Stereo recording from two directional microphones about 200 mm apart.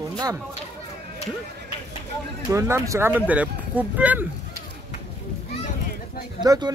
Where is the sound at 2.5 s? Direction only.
15° right (ahead or behind).